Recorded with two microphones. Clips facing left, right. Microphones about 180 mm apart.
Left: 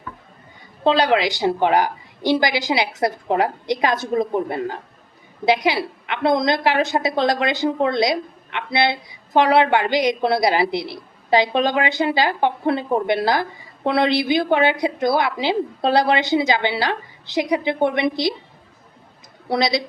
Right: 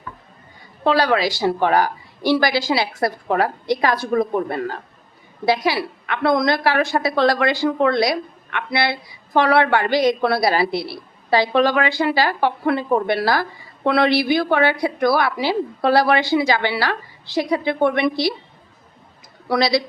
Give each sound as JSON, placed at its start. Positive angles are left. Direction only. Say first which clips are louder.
{"t": 0.9, "sound": "a woman's voice", "louder": "even", "side_deg": 20}
{"t": 19.5, "sound": "a woman's voice", "louder": "right 2 dB", "side_deg": 20}